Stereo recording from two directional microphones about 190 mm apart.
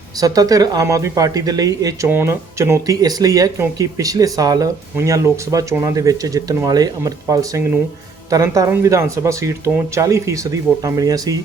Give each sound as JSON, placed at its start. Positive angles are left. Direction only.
{"t": 0.2, "sound": "speech", "side_deg": -20}